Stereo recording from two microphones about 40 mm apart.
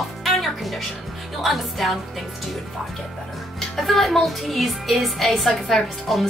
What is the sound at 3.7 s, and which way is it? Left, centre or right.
A woman's voice, centre.